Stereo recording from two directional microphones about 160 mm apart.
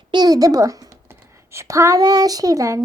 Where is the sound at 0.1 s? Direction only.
25° right (ahead or behind).